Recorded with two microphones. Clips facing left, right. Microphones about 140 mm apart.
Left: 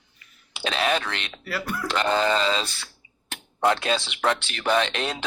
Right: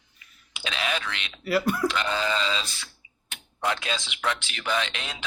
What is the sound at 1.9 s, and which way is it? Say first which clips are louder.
Speech: left 5 dB; 40° left (ahead or behind).